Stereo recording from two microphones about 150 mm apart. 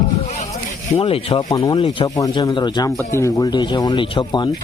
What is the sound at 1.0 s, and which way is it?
Speech, 40° left (ahead or behind).